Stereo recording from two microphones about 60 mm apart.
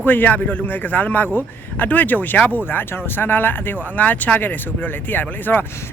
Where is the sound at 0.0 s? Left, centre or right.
Left.